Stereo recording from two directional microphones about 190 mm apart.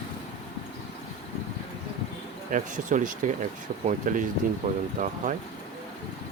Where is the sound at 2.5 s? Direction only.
45° right (ahead or behind).